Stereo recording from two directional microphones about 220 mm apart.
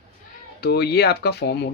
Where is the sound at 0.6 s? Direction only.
45° left (ahead or behind).